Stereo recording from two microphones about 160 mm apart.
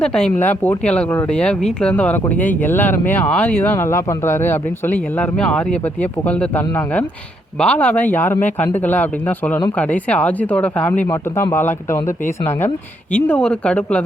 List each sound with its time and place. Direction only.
0.0 s speech: 5° left (ahead or behind)